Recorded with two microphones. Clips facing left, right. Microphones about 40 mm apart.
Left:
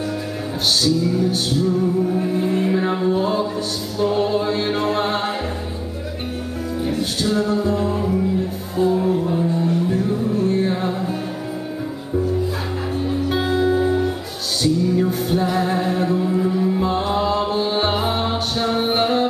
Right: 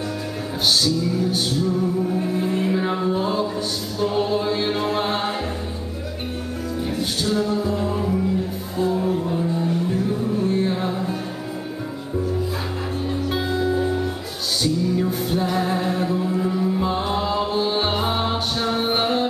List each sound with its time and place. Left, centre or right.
0.8 s music: centre
4.0 s a capella: centre
6.8 s music: centre
13.0 s music: centre
13.4 s music: centre
13.7 s music: left
14.6 s music: centre